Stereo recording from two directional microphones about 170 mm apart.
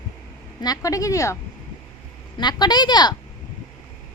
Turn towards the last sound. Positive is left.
turn(degrees=25)  # may be behind; listen again after turning